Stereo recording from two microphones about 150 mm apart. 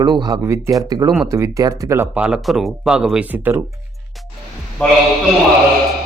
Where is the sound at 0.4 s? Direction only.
15° right (ahead or behind).